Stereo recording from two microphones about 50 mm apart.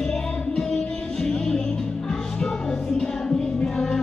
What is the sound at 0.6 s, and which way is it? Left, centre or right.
Music, centre.